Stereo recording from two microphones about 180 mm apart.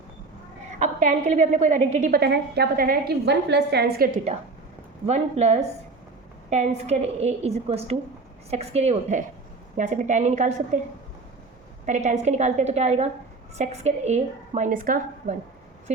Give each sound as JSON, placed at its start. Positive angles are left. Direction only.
{"t": 0.8, "sound": "a woman's voice", "side_deg": -45}
{"t": 5.0, "sound": "a woman's voice", "side_deg": -40}
{"t": 11.9, "sound": "a woman's voice", "side_deg": -40}